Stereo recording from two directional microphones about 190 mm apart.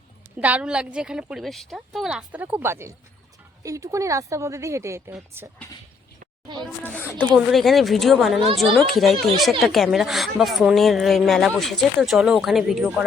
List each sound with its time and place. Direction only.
0.3 s speech: 10° right (ahead or behind)
6.8 s speech: 10° left (ahead or behind); by 13.1 s 5° right (ahead or behind)